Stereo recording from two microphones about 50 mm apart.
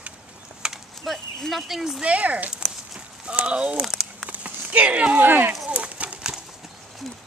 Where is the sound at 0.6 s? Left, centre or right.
Centre.